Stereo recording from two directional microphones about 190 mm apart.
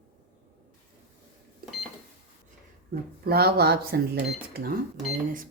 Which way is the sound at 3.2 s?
55° right (ahead or behind).